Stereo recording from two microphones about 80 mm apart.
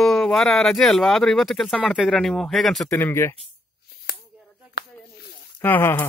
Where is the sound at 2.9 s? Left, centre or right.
Left.